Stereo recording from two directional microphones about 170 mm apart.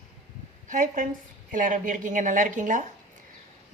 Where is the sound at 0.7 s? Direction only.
50° right (ahead or behind).